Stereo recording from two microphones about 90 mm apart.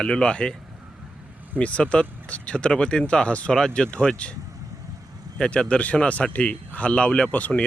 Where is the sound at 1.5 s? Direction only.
15° left (ahead or behind).